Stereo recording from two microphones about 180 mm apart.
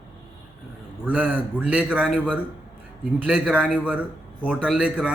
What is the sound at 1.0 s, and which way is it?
A man's voice, 5° right (ahead or behind).